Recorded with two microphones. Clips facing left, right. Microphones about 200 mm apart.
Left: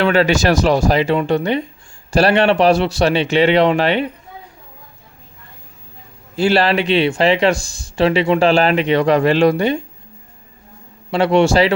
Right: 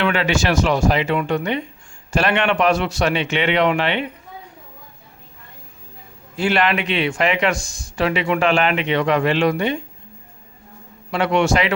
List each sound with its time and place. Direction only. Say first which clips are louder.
0.0 s speech: left 5 dB; 40° left (ahead or behind)
6.3 s speech: left 4 dB; 30° left (ahead or behind)
11.1 s speech: left 5 dB; 30° left (ahead or behind)